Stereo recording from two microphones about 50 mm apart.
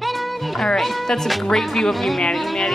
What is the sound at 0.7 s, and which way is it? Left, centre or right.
A woman's voice, centre.